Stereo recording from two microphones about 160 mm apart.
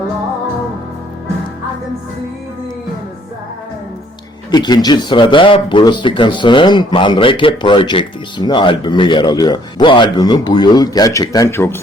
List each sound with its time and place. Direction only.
4.5 s speech: 25° left (ahead or behind)